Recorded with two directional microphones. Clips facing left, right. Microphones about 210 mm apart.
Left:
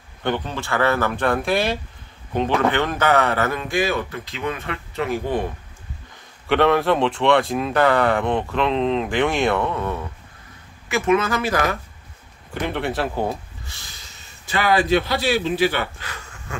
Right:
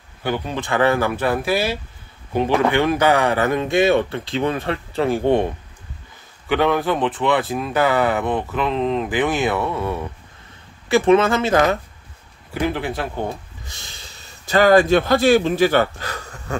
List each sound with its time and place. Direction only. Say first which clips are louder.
0.2 s speech: even; 5° right (ahead or behind)
0.6 s speech: right 4 dB; 15° right (ahead or behind)
6.5 s speech: left 1 dB; centre (ahead or behind)
11.1 s speech: right 3 dB; 25° right (ahead or behind)
12.5 s speech: right 1 dB; centre (ahead or behind)
14.4 s a man's voice: right 7 dB; 40° right (ahead or behind)